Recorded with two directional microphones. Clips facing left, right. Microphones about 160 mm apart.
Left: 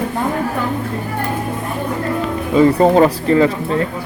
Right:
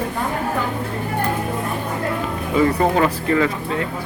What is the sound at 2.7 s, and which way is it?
Speech, 30° left (ahead or behind).